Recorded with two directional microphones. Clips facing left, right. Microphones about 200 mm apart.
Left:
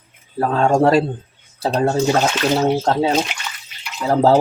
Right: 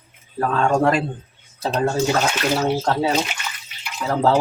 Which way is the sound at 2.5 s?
25° left (ahead or behind).